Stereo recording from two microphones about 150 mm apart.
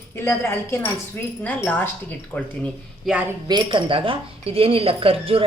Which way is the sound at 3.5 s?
30° right (ahead or behind).